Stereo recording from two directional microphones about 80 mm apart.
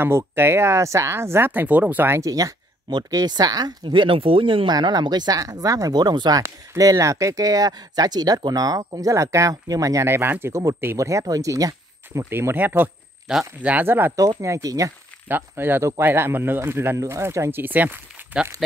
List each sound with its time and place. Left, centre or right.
0.0 s speech: right
2.1 s speech: right
3.8 s speech: right
4.7 s speech: right
5.4 s speech: right
6.8 s speech: right
10.0 s speech: right
11.0 s speech: right
14.4 s speech: right
15.2 s speech: right